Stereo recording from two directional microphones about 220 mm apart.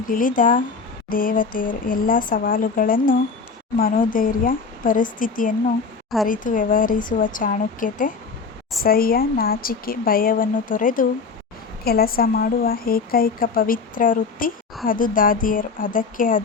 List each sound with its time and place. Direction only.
0.1 s a woman's voice: 40° left (ahead or behind)